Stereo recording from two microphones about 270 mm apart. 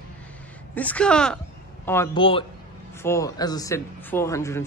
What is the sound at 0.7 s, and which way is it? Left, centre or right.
A man's voice, centre.